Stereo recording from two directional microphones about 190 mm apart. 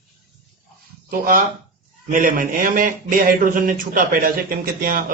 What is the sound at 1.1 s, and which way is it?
Speech, 45° right (ahead or behind).